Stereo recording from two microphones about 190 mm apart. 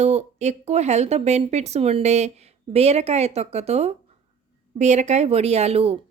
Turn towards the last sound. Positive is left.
turn(degrees=-30)  # may be behind; listen again after turning